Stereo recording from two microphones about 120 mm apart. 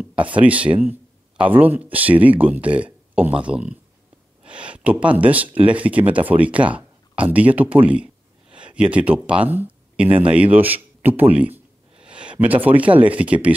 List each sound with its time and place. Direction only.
0.1 s a man's voice: 10° right (ahead or behind)